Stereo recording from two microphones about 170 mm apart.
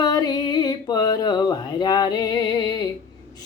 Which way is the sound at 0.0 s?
20° left (ahead or behind).